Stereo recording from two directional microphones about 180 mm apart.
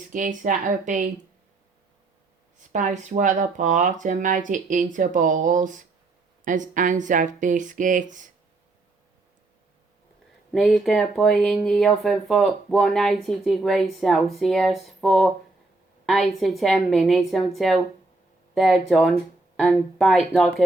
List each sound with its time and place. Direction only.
0.1 s speech: 50° right (ahead or behind)
2.7 s speech: 40° right (ahead or behind)
10.5 s speech: centre (ahead or behind)
16.4 s speech: centre (ahead or behind)